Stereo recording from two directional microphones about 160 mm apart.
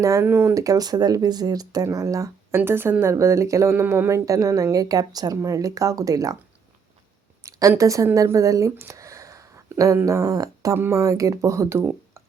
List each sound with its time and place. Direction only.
0.0 s speech: 20° right (ahead or behind)
7.4 s speech: 20° right (ahead or behind)